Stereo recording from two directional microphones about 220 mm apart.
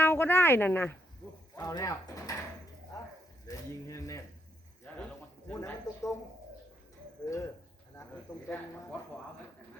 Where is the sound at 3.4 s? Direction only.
15° left (ahead or behind).